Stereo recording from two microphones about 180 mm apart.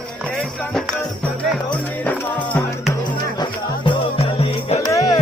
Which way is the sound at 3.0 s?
25° left (ahead or behind).